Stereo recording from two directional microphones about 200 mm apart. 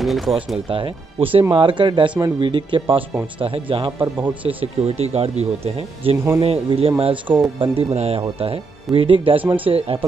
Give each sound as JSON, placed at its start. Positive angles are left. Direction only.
{"t": 0.0, "sound": "speech", "side_deg": 0}
{"t": 0.7, "sound": "speech", "side_deg": -25}
{"t": 4.0, "sound": "a man's voice", "side_deg": -10}
{"t": 4.5, "sound": "speech", "side_deg": -30}
{"t": 7.2, "sound": "a man's voice", "side_deg": -10}
{"t": 7.6, "sound": "speech", "side_deg": -30}